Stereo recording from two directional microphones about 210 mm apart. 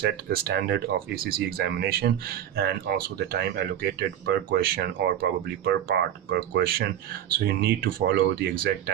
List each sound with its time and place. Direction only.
0.0 s speech: 50° right (ahead or behind)